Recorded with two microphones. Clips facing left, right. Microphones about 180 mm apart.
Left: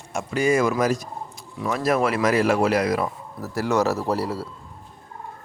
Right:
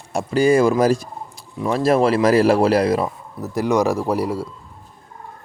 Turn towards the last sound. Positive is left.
turn(degrees=-15)  # may be behind; listen again after turning